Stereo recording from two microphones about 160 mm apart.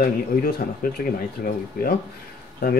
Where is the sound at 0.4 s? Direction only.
65° left (ahead or behind).